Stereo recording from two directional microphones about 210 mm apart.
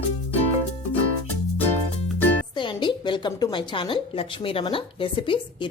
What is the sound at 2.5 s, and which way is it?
A woman's voice, 20° left (ahead or behind).